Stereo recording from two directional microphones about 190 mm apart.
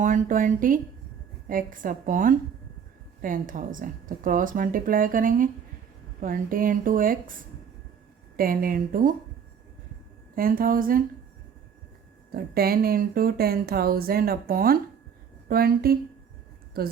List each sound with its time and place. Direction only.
0.0 s speech: 45° right (ahead or behind)
8.4 s speech: 50° right (ahead or behind)
10.3 s speech: 50° right (ahead or behind)
12.5 s speech: 50° right (ahead or behind)